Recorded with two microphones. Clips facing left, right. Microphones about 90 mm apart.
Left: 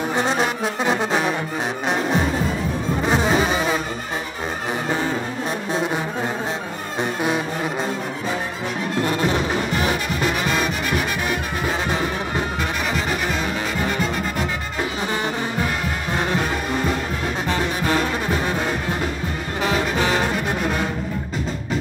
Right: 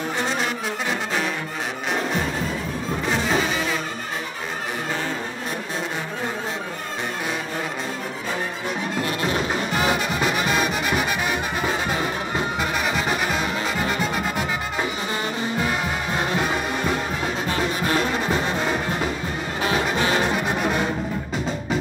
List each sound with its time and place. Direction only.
0.1 s brass instrument: 20° left (ahead or behind)
3.1 s music: 20° left (ahead or behind)
9.8 s music: 15° right (ahead or behind)